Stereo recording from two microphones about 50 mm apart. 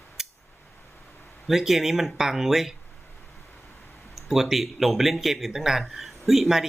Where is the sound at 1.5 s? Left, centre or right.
Centre.